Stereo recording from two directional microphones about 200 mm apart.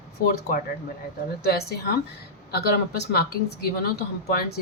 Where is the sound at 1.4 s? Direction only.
50° left (ahead or behind).